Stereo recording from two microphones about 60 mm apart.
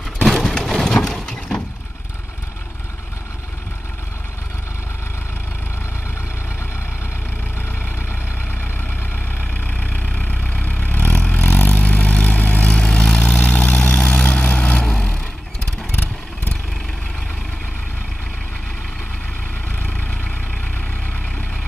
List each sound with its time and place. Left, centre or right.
0.2 s a sound: centre
9.7 s vehicle: left
14.8 s vehicle: centre